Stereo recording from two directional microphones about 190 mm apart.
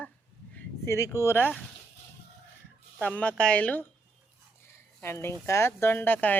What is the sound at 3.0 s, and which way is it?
Speech, 5° left (ahead or behind).